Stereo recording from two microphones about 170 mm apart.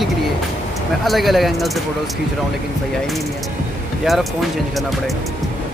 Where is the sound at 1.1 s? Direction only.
Centre (ahead or behind).